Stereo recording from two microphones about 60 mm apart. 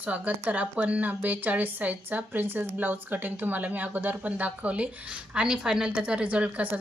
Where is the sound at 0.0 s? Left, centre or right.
Right.